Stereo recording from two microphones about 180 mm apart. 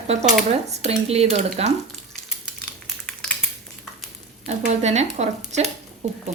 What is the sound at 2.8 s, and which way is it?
Typing, 5° left (ahead or behind).